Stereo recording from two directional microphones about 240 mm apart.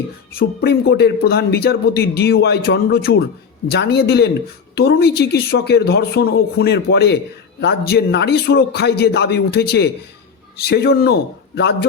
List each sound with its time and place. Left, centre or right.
0.3 s a man's voice: left